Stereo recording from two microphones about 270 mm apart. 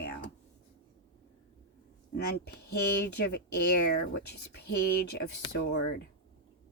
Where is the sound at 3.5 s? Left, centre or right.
Left.